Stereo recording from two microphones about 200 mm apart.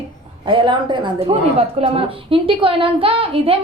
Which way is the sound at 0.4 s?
25° right (ahead or behind).